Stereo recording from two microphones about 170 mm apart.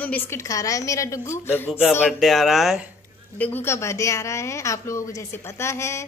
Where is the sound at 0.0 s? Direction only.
15° left (ahead or behind).